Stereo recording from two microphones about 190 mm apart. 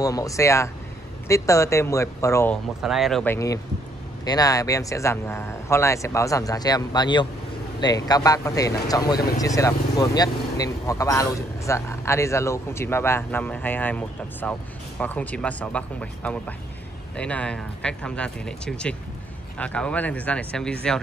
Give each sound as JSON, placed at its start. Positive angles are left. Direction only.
{"t": 0.0, "sound": "speech", "side_deg": 20}
{"t": 2.8, "sound": "speech", "side_deg": 0}
{"t": 3.3, "sound": "speech", "side_deg": 15}